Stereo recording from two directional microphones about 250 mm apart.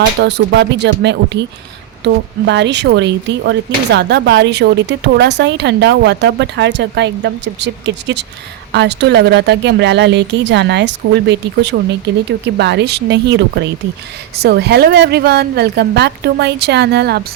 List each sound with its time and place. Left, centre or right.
0.2 s a woman's voice: right